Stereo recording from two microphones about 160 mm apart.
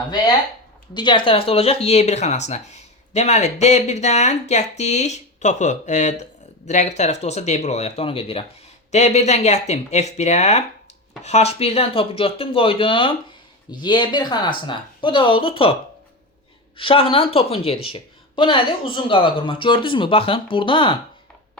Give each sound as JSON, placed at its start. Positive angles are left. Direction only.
{"t": 0.9, "sound": "a woman's voice", "side_deg": 30}
{"t": 16.7, "sound": "a woman's voice", "side_deg": 35}